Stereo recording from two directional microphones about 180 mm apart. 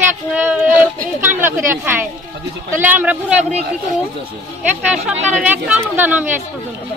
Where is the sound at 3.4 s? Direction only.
40° right (ahead or behind).